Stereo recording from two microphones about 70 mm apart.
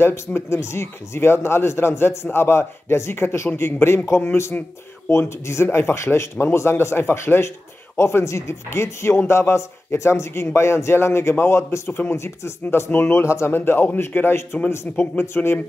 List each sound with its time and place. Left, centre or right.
0.0 s a man's voice: left